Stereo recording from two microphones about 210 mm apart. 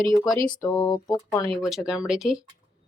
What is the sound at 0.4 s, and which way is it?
Speech, 20° left (ahead or behind).